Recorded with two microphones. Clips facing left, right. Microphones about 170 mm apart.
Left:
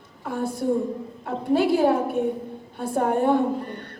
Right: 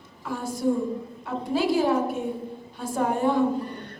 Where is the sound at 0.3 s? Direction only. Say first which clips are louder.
Left 1 dB; 60° left (ahead or behind).